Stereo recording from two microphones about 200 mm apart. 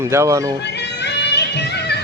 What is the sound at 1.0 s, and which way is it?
Music, 60° left (ahead or behind).